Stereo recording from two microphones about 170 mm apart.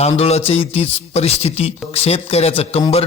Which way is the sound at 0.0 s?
40° left (ahead or behind).